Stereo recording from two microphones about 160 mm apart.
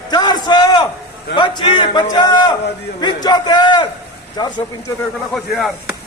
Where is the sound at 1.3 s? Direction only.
30° left (ahead or behind).